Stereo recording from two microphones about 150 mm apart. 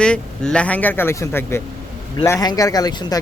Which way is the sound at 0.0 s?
5° left (ahead or behind).